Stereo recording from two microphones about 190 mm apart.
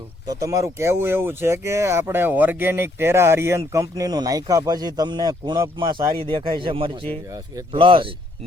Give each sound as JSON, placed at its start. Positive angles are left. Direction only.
{"t": 0.3, "sound": "speech", "side_deg": -15}